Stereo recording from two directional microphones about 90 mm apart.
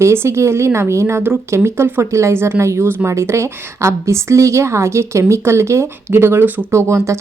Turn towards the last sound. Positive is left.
turn(degrees=-30)  # may be behind; listen again after turning